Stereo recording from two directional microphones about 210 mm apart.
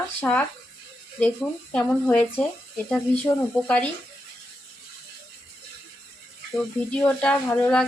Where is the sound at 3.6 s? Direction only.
5° left (ahead or behind).